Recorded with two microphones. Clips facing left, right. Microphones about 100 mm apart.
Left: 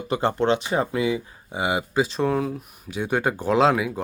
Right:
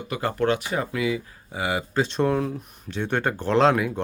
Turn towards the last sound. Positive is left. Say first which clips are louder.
# even
turn(degrees=5)  # may be behind; listen again after turning